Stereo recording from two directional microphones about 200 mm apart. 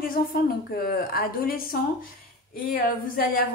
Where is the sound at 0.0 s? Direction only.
45° left (ahead or behind).